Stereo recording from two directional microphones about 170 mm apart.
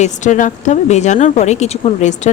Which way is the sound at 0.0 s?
45° left (ahead or behind).